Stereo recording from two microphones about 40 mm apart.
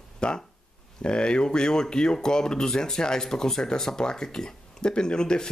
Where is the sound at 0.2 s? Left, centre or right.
Left.